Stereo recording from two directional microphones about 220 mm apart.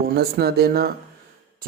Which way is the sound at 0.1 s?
45° right (ahead or behind).